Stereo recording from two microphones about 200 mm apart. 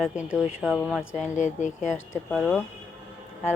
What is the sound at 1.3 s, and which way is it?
Speech, 35° left (ahead or behind).